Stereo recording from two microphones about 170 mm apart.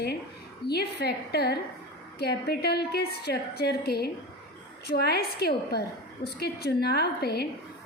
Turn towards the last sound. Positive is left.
turn(degrees=70)  # may be behind; listen again after turning